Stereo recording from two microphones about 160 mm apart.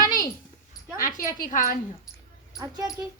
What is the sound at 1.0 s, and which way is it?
Speech, 55° left (ahead or behind).